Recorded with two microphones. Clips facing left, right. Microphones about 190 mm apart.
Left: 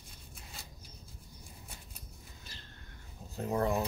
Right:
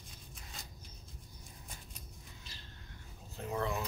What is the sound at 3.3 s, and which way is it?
Speech, 40° left (ahead or behind).